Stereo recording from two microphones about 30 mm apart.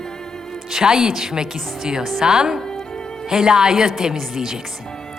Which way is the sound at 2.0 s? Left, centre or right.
Centre.